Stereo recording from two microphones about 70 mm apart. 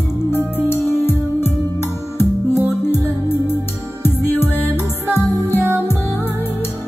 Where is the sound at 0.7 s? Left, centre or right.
Left.